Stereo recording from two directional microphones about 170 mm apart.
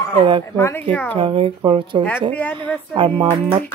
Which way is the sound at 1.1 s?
30° right (ahead or behind).